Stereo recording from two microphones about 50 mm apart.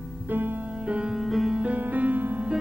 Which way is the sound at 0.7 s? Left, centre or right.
Right.